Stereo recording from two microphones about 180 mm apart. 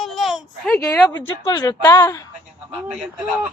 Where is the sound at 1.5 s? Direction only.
20° left (ahead or behind).